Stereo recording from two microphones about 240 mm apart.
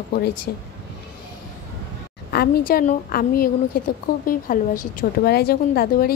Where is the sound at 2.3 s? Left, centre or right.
Left.